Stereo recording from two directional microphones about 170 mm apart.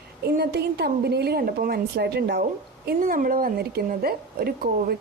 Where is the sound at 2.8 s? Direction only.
55° right (ahead or behind).